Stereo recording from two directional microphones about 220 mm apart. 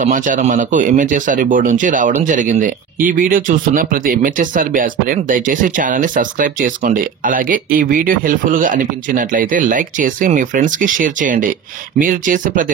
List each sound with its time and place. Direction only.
0.0 s speech: 35° right (ahead or behind)